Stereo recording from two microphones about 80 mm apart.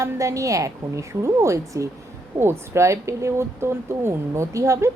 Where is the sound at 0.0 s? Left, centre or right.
Right.